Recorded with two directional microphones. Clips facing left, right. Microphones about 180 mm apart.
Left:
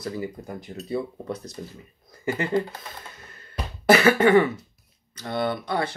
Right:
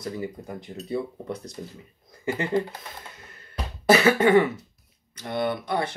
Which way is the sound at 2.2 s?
20° right (ahead or behind).